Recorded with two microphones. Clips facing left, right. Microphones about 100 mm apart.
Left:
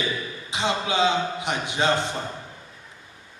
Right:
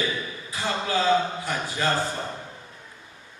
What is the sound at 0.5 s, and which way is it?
A man's voice, 85° left.